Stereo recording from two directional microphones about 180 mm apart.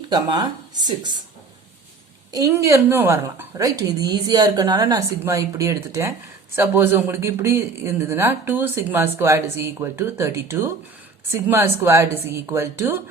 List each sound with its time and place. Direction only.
0.1 s a woman's voice: 25° right (ahead or behind)
2.3 s a woman's voice: 20° right (ahead or behind)